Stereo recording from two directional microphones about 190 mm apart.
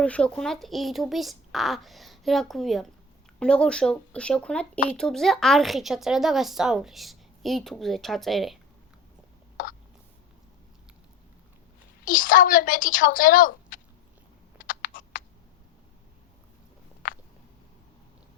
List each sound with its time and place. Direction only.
0.0 s speech: 5° left (ahead or behind)
9.6 s hiccup: 45° left (ahead or behind)
12.0 s speech: 45° left (ahead or behind)
14.6 s computer keyboard: 45° left (ahead or behind)
17.0 s a sound: 45° left (ahead or behind)